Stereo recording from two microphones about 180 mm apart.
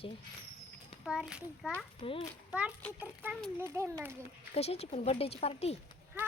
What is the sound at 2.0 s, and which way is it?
Speech, 30° left (ahead or behind).